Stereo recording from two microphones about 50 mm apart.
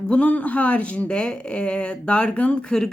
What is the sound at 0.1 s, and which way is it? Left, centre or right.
Speech, left.